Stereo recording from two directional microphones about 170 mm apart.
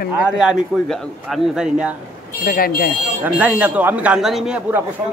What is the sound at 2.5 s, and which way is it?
Speech, 60° left (ahead or behind).